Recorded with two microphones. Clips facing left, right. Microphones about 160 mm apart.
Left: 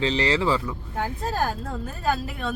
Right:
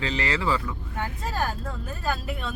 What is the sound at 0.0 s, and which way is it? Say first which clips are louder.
Speech: left 5 dB; 30° left (ahead or behind).